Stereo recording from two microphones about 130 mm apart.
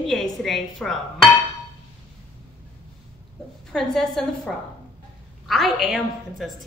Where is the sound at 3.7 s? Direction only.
5° left (ahead or behind).